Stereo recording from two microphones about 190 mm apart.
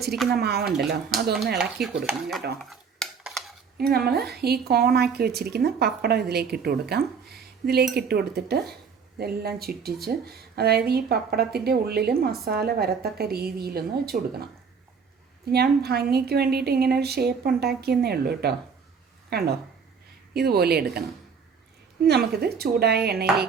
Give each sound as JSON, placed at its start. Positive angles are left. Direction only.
{"t": 0.3, "sound": "a woman's voice", "side_deg": -60}
{"t": 1.5, "sound": "speech", "side_deg": 0}
{"t": 2.6, "sound": "dishes", "side_deg": 0}
{"t": 3.8, "sound": "a woman's voice", "side_deg": -55}
{"t": 15.4, "sound": "a woman's voice", "side_deg": -55}
{"t": 22.0, "sound": "a woman's voice", "side_deg": -60}